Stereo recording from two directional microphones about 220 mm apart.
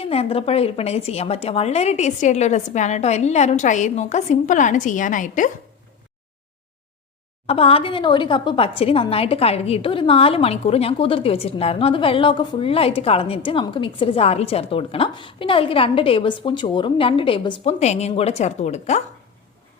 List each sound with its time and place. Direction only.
0.0 s a woman's voice: 25° left (ahead or behind)
7.4 s a woman's voice: 25° left (ahead or behind)